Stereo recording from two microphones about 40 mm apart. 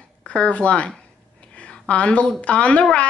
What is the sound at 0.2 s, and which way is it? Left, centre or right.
Speech, left.